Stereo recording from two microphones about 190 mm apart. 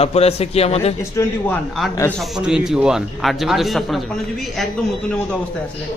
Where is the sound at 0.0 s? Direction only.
30° left (ahead or behind).